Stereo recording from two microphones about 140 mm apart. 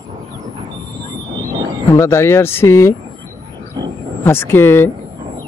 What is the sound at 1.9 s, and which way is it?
Speech, 20° left (ahead or behind).